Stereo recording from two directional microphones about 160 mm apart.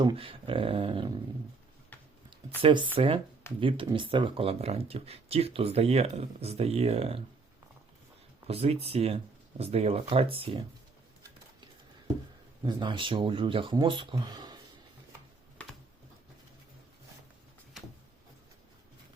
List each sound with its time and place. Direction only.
0.0 s speech: 30° right (ahead or behind)
2.6 s speech: 30° right (ahead or behind)
8.4 s speech: 40° right (ahead or behind)
12.6 s speech: 30° right (ahead or behind)
17.7 s a sound: centre (ahead or behind)